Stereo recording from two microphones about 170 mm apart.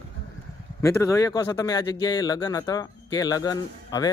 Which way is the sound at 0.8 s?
15° left (ahead or behind).